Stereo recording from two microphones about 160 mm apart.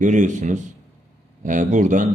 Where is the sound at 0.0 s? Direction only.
50° right (ahead or behind).